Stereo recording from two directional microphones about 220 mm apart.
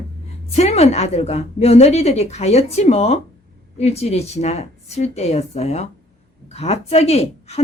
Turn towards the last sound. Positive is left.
turn(degrees=30)  # may be behind; listen again after turning